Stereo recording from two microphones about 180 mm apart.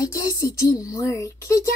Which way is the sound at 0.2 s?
15° left (ahead or behind).